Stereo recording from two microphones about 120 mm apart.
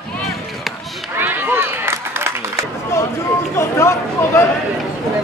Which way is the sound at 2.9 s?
25° left (ahead or behind).